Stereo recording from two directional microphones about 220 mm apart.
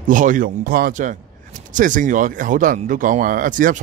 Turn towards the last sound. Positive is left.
turn(degrees=-40)  # may be behind; listen again after turning